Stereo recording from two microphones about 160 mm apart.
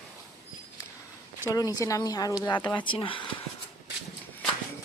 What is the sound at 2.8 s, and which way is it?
Speech, 35° left (ahead or behind).